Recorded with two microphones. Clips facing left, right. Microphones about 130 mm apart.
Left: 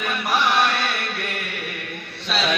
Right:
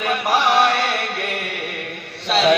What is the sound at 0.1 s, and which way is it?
Music, 35° right (ahead or behind).